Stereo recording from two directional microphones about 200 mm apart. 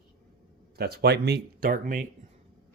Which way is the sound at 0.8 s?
50° right (ahead or behind).